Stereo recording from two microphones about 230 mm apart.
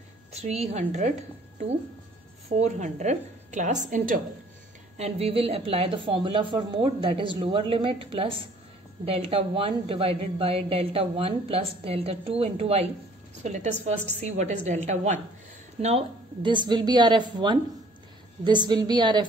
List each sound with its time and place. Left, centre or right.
0.3 s a woman's voice: right
2.5 s a woman's voice: right
16.4 s a woman's voice: centre